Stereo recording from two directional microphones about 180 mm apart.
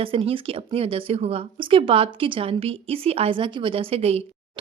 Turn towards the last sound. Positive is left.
turn(degrees=-35)  # may be behind; listen again after turning